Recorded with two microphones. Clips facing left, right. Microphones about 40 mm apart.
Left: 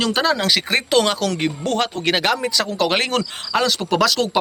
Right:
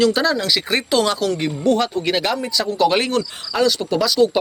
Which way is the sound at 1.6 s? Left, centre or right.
Left.